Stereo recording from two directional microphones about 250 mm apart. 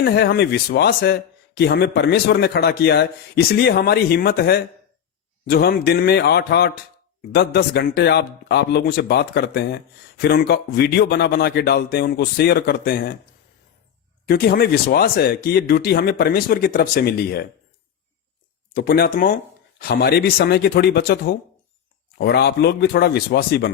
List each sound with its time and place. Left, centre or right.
0.0 s speech: left
14.3 s speech: left
18.7 s speech: left